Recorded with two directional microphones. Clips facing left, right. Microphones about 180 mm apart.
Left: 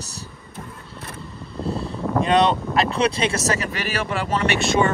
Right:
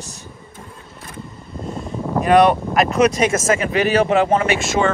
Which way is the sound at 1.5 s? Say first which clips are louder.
Left 2 dB; 35° left (ahead or behind).